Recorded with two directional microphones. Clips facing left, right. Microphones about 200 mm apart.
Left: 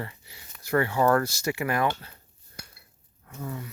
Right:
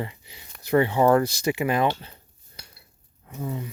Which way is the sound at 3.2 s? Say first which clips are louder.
Right 4 dB; 20° right (ahead or behind).